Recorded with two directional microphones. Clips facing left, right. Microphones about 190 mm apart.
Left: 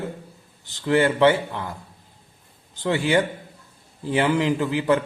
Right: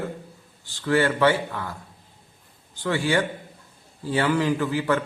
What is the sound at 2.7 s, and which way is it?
A man's voice, 20° left (ahead or behind).